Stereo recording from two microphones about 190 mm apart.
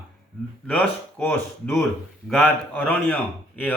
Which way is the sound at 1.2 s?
10° left (ahead or behind).